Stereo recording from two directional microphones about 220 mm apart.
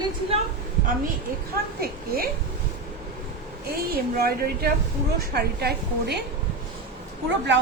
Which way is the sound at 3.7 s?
45° right (ahead or behind).